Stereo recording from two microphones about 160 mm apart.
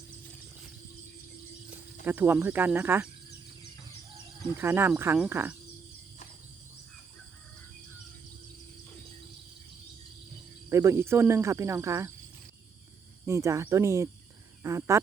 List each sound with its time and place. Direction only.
1.7 s speech: 10° right (ahead or behind)
4.5 s cricket: 15° right (ahead or behind)
10.7 s cricket: 15° right (ahead or behind)
13.2 s speech: 20° right (ahead or behind)